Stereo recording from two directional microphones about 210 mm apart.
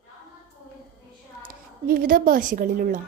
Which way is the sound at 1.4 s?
40° right (ahead or behind).